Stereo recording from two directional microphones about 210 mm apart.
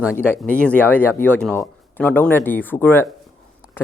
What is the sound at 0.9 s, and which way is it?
Speech, 10° left (ahead or behind).